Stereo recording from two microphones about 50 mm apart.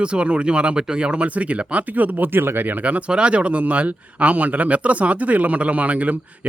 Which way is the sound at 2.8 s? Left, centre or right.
Right.